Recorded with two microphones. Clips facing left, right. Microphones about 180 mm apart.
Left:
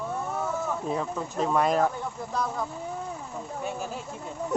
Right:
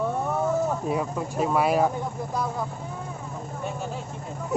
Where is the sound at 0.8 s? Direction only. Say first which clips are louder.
Right 3 dB; 10° right (ahead or behind).